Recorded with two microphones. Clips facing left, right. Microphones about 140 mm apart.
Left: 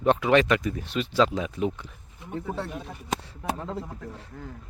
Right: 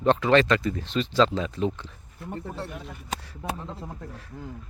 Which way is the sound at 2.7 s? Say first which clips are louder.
Left 3 dB; 25° left (ahead or behind).